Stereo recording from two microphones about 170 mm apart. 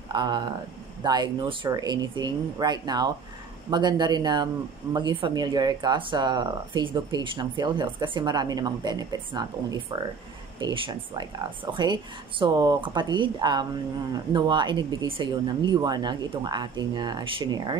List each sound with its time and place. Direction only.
0.1 s speech: 25° right (ahead or behind)